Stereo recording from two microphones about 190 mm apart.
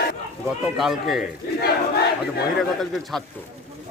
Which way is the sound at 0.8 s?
Centre (ahead or behind).